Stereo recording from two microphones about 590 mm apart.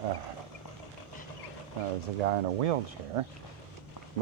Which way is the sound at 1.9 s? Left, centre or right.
Right.